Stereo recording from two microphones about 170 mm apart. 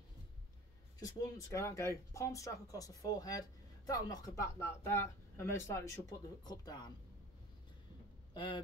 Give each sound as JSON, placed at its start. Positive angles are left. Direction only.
{"t": 0.9, "sound": "speech", "side_deg": 20}
{"t": 8.4, "sound": "speech", "side_deg": 25}